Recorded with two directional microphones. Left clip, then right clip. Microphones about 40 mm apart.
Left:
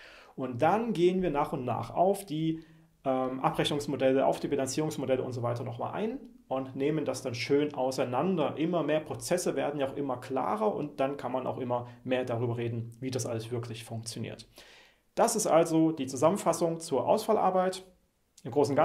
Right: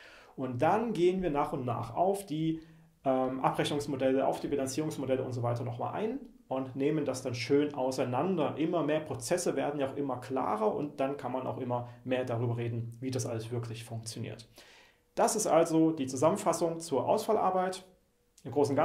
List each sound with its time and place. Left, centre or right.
0.4 s speech: left